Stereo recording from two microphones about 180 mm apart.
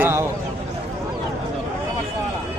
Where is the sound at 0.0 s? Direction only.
15° right (ahead or behind).